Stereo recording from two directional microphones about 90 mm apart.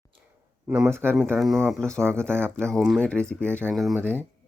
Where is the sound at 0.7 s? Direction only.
30° right (ahead or behind).